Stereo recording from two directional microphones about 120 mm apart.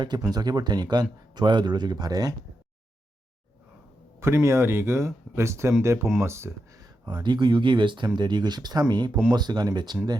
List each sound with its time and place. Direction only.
0.0 s speech: 35° right (ahead or behind)
4.2 s speech: 20° right (ahead or behind)
7.0 s speech: 35° right (ahead or behind)